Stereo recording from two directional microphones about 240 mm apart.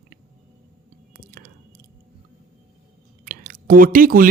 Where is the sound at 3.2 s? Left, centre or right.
Right.